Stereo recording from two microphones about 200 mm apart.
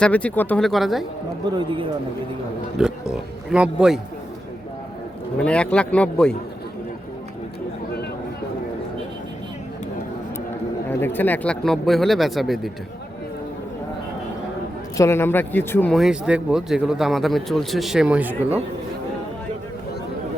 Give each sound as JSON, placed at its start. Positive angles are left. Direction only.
{"t": 0.0, "sound": "speech", "side_deg": 5}
{"t": 1.5, "sound": "speech", "side_deg": -25}
{"t": 3.1, "sound": "speech", "side_deg": -5}
{"t": 5.4, "sound": "speech", "side_deg": 5}
{"t": 10.8, "sound": "speech", "side_deg": 10}
{"t": 14.9, "sound": "speech", "side_deg": 15}